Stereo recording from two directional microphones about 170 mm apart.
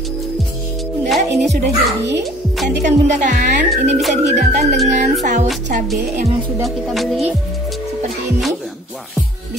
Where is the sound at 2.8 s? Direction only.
45° right (ahead or behind).